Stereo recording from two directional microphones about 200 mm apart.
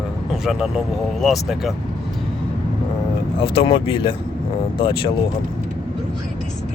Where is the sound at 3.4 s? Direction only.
25° left (ahead or behind).